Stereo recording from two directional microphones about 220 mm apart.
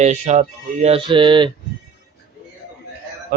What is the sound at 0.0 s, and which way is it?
A man's voice, 30° right (ahead or behind).